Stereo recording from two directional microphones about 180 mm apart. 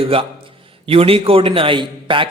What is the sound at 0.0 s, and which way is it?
A man's voice, 30° right (ahead or behind).